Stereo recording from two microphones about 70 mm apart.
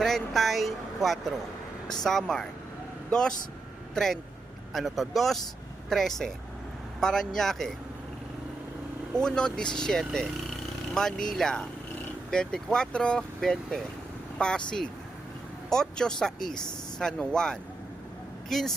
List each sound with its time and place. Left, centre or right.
0.0 s speech: centre
9.1 s speech: centre